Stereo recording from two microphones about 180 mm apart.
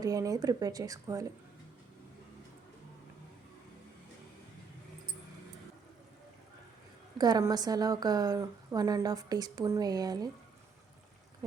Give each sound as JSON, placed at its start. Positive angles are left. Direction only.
{"t": 0.0, "sound": "a woman's voice", "side_deg": -20}
{"t": 7.2, "sound": "a woman's voice", "side_deg": -20}